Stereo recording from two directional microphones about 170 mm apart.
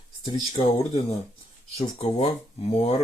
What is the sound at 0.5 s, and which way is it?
Speech, 35° left (ahead or behind).